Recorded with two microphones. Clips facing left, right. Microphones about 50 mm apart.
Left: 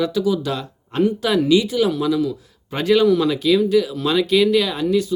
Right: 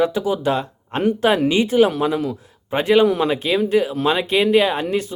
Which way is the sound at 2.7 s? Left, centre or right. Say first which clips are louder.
Even; right.